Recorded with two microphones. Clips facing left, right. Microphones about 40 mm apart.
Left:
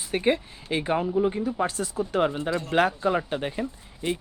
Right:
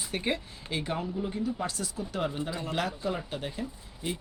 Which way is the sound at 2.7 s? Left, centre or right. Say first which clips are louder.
Left 10 dB; left.